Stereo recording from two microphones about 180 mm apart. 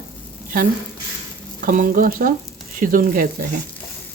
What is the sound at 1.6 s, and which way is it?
Speech, 50° right (ahead or behind).